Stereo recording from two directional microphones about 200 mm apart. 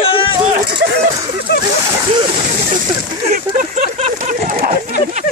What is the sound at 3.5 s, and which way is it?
Speech, 40° right (ahead or behind).